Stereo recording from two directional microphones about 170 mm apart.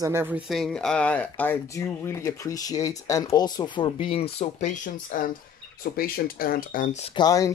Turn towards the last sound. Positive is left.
turn(degrees=20)  # may be behind; listen again after turning